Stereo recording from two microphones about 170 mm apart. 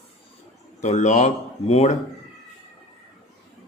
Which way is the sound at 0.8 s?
45° left (ahead or behind).